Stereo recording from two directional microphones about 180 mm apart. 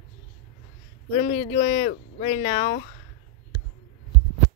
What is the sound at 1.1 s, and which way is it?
Speech, 45° left (ahead or behind).